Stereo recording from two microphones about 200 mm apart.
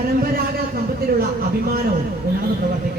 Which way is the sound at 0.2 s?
50° right (ahead or behind).